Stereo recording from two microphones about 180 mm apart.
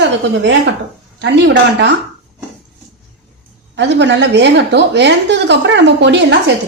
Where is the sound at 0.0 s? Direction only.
90° right.